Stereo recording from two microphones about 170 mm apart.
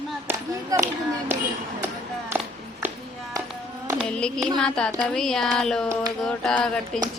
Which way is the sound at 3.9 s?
5° left (ahead or behind).